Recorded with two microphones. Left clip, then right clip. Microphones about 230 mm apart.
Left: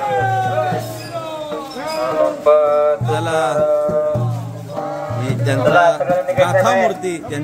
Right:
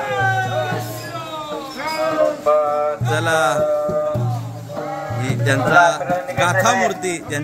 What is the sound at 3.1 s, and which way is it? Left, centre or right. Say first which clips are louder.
Music: even; centre.